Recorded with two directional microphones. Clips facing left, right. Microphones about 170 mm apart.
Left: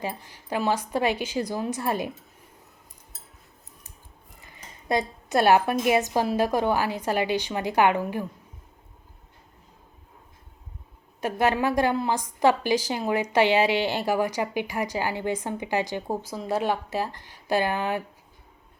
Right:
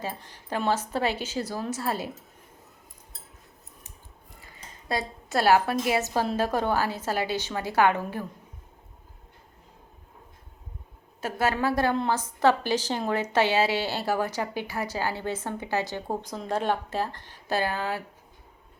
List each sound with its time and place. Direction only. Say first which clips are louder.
0.0 s a woman's voice: left 2 dB; 10° left (ahead or behind)
4.9 s a woman's voice: left 5 dB; 20° left (ahead or behind)
11.2 s a woman's voice: left 3 dB; 20° left (ahead or behind)